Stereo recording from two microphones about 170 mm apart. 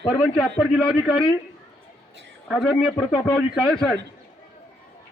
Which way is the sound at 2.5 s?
5° left (ahead or behind).